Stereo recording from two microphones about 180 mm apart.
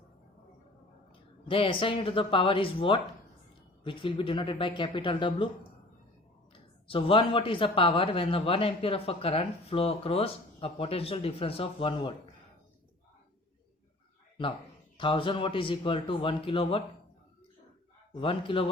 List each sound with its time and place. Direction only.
1.5 s speech: 30° left (ahead or behind)
6.5 s speech: 30° left (ahead or behind)
14.9 s speech: 25° left (ahead or behind)
18.1 s speech: 30° left (ahead or behind)